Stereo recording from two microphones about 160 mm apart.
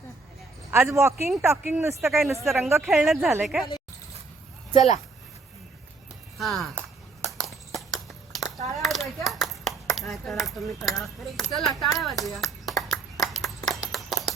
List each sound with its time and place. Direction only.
0.7 s speech: 15° right (ahead or behind)
2.0 s a woman's voice: centre (ahead or behind)
2.6 s speech: 15° right (ahead or behind)
2.8 s a woman's voice: centre (ahead or behind)
6.4 s a sound: centre (ahead or behind)
11.8 s ping: centre (ahead or behind)
13.4 s a sound: centre (ahead or behind)